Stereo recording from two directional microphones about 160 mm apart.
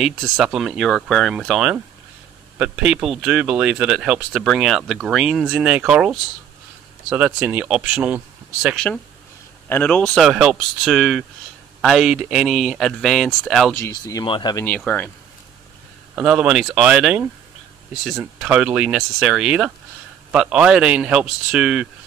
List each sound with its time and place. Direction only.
0.0 s speech: centre (ahead or behind)
8.7 s speech: 5° left (ahead or behind)
10.2 s speech: 5° right (ahead or behind)
13.7 s speech: 20° left (ahead or behind)
14.2 s speech: 30° left (ahead or behind)
14.8 s speech: 10° left (ahead or behind)
16.2 s speech: 5° right (ahead or behind)